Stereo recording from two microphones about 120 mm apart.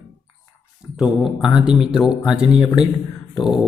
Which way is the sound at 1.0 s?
5° right (ahead or behind).